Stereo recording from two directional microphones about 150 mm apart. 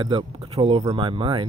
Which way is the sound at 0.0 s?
30° right (ahead or behind).